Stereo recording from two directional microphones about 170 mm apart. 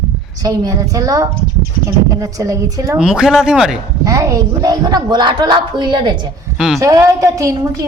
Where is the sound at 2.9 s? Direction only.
5° right (ahead or behind).